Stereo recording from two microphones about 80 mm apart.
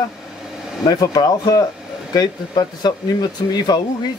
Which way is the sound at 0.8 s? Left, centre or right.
Left.